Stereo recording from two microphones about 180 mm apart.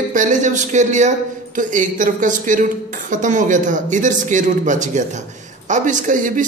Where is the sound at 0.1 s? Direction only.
45° right (ahead or behind).